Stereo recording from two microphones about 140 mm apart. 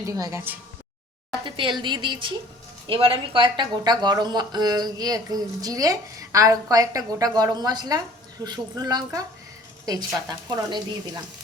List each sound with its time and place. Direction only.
0.0 s speech: 25° right (ahead or behind)
1.5 s a woman's voice: 35° right (ahead or behind)
10.2 s speech: 30° right (ahead or behind)